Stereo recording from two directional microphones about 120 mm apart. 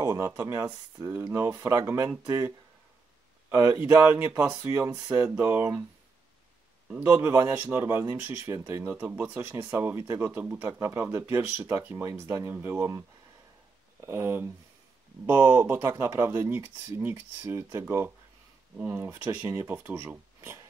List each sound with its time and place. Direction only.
0.0 s speech: 20° right (ahead or behind)
7.0 s speech: 15° right (ahead or behind)
14.0 s speech: 20° right (ahead or behind)
20.3 s a sound: 25° right (ahead or behind)